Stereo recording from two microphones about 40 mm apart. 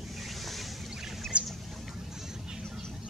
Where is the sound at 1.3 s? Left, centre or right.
Right.